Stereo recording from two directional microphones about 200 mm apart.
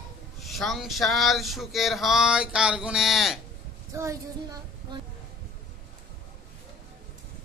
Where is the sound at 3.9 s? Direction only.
15° right (ahead or behind).